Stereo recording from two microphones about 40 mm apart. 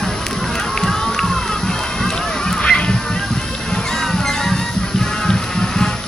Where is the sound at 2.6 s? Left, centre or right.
Left.